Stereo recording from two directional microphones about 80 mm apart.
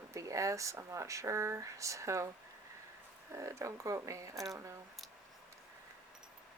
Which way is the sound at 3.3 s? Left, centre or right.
Right.